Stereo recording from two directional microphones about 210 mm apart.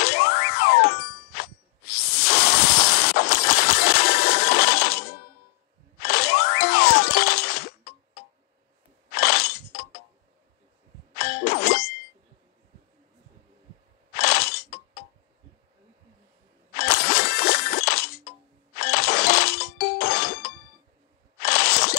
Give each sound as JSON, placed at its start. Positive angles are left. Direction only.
{"t": 0.0, "sound": "ding", "side_deg": 50}
{"t": 6.0, "sound": "music", "side_deg": 50}
{"t": 9.1, "sound": "breaking", "side_deg": 45}
{"t": 11.1, "sound": "ding", "side_deg": 50}
{"t": 14.1, "sound": "breaking", "side_deg": 45}
{"t": 16.7, "sound": "music", "side_deg": 50}
{"t": 21.4, "sound": "squish", "side_deg": 50}